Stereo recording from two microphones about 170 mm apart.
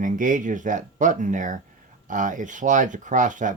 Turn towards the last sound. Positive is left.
turn(degrees=-50)  # may be behind; listen again after turning